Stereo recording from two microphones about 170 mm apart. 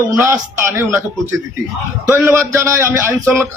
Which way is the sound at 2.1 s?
15° right (ahead or behind).